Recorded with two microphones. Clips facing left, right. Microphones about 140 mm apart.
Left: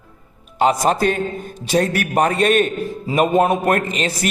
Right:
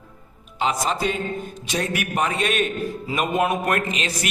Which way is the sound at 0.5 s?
45° left (ahead or behind).